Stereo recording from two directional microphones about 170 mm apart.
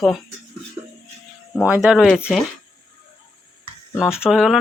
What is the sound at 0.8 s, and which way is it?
Music, 20° right (ahead or behind).